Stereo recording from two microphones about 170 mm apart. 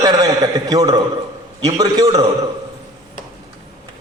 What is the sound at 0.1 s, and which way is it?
A man's voice, 25° right (ahead or behind).